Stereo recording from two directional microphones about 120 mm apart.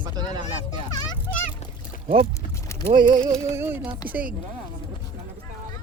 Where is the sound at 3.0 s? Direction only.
40° right (ahead or behind).